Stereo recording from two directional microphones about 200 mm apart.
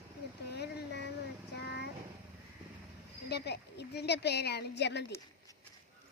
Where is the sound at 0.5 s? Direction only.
55° left (ahead or behind).